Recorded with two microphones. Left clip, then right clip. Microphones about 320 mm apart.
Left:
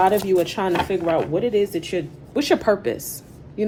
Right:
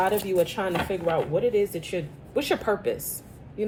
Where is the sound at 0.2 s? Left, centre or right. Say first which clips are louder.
Left 4 dB; left.